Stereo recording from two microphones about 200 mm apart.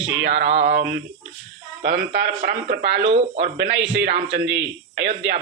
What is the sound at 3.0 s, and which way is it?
Speech, 35° right (ahead or behind).